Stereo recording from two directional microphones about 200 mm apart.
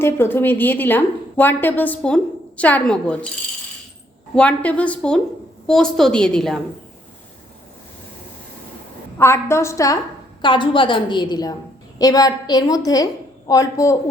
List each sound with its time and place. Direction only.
0.0 s a woman's voice: 10° left (ahead or behind)
4.4 s a woman's voice: 5° left (ahead or behind)
9.1 s a woman's voice: 15° left (ahead or behind)